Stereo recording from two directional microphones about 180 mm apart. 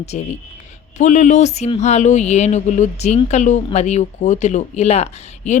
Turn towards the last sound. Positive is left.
turn(degrees=40)  # may be behind; listen again after turning